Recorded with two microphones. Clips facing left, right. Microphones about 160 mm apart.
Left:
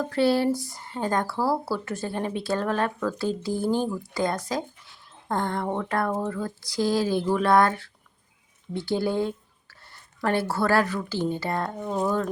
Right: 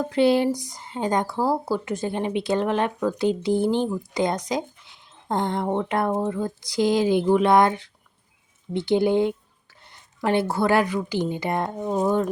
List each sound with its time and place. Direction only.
0.0 s speech: 20° right (ahead or behind)